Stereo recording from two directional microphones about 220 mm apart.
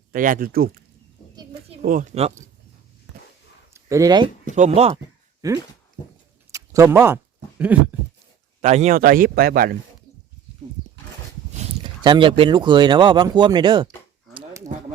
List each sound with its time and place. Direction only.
0.1 s a man's voice: 40° right (ahead or behind)
1.8 s a man's voice: 40° right (ahead or behind)
3.7 s a sound: 15° right (ahead or behind)
4.5 s speech: 30° right (ahead or behind)
5.4 s speech: 15° right (ahead or behind)
7.6 s a sound: 5° right (ahead or behind)
8.6 s a man's voice: 30° right (ahead or behind)
11.5 s speech: 25° right (ahead or behind)
14.3 s a sound: 15° right (ahead or behind)